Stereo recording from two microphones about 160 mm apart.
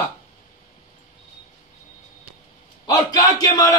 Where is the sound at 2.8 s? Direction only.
20° left (ahead or behind).